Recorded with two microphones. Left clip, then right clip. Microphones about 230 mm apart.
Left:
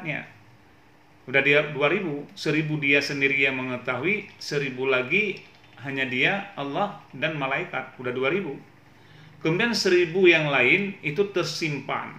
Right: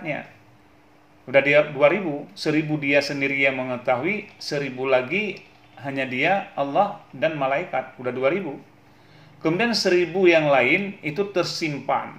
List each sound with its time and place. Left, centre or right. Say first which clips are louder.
1.2 s a man's voice: right 3 dB; centre
9.4 s a man's voice: right 2 dB; centre